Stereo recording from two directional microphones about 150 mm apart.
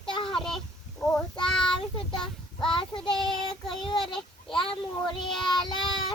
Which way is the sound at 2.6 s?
35° left (ahead or behind).